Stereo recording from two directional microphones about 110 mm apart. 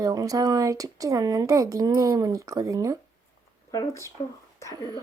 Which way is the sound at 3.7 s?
30° left (ahead or behind).